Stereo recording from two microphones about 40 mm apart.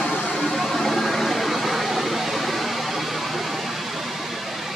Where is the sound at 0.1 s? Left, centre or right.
Left.